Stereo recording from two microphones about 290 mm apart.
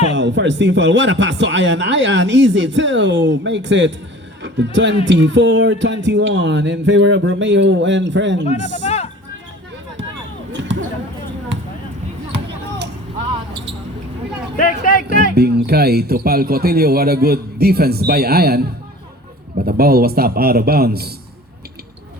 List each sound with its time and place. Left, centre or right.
0.1 s speech: right
8.6 s speech: left
10.5 s basketball bounce: right
14.5 s speech: left
15.0 s speech: right